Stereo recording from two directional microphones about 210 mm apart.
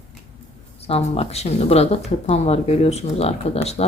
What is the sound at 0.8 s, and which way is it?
Speech, 30° left (ahead or behind).